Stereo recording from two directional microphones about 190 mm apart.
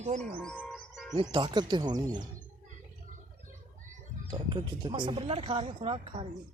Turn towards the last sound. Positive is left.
turn(degrees=-30)  # may be behind; listen again after turning